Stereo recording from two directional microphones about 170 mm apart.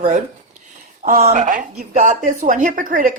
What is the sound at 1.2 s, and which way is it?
Speech, 40° right (ahead or behind).